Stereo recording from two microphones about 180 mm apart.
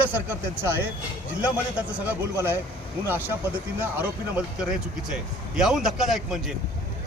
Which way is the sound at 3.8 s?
10° right (ahead or behind).